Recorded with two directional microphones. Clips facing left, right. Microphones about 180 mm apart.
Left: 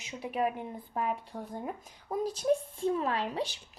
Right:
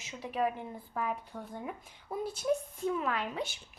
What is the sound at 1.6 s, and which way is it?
Speech, 40° left (ahead or behind).